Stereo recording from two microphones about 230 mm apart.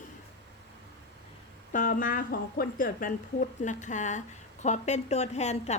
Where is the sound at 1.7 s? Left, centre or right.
Left.